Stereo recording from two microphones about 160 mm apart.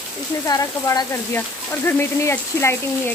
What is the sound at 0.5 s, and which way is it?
Speech, 20° left (ahead or behind).